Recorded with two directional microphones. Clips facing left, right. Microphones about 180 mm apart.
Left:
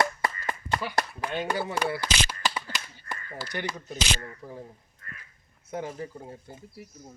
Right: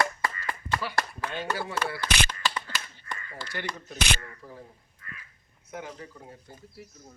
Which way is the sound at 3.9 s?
60° right (ahead or behind).